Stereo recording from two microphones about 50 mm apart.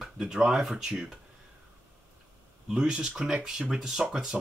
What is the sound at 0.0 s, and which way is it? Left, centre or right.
Speech, centre.